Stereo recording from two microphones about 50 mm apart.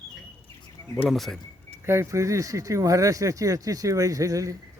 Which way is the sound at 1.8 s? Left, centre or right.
Right.